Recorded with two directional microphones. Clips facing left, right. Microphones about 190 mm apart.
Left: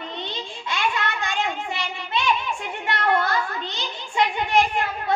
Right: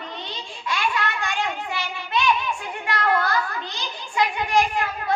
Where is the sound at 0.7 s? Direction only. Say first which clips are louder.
Right 1 dB; 20° left (ahead or behind).